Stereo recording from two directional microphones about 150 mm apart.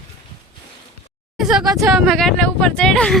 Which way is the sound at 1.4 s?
5° right (ahead or behind).